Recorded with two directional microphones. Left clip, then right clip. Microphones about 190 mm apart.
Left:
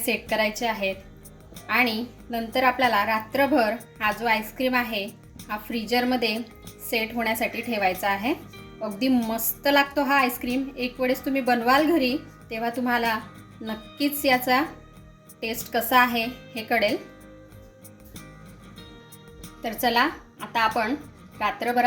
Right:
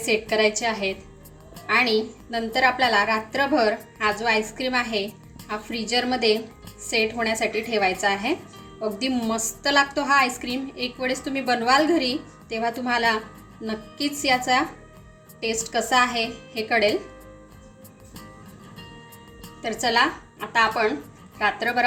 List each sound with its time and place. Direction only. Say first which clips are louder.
0.0 s a woman's voice: right 3 dB; 25° left (ahead or behind)
20.5 s a woman's voice: right 3 dB; 20° left (ahead or behind)